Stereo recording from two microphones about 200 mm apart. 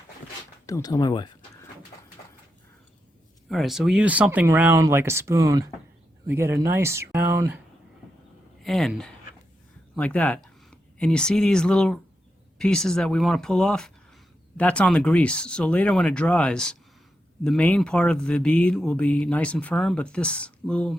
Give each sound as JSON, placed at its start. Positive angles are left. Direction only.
{"t": 0.7, "sound": "speech", "side_deg": 15}
{"t": 3.5, "sound": "speech", "side_deg": 0}
{"t": 8.6, "sound": "speech", "side_deg": 0}